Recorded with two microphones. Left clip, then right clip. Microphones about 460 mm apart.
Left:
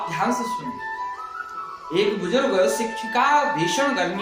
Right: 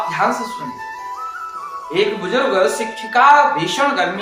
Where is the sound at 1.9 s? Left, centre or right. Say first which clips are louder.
Right 4 dB; left.